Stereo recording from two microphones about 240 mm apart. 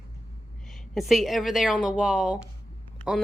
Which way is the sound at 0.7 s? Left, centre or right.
Centre.